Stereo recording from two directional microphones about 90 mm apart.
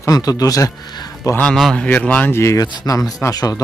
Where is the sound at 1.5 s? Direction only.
Centre (ahead or behind).